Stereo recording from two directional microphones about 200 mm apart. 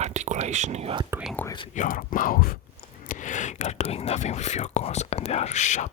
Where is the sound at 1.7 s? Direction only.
40° left (ahead or behind).